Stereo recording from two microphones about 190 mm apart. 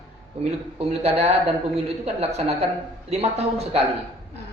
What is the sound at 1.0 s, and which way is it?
Speech, 35° right (ahead or behind).